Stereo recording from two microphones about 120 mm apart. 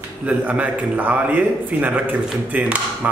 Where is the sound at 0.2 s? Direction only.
10° right (ahead or behind).